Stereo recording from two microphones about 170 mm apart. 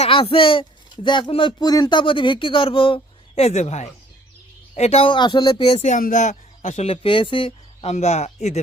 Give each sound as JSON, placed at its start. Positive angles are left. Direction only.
{"t": 0.0, "sound": "speech", "side_deg": 30}